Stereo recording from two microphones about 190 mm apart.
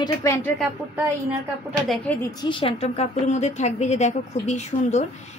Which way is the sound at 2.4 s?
30° left (ahead or behind).